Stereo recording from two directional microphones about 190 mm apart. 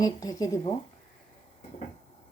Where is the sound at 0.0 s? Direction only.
20° left (ahead or behind).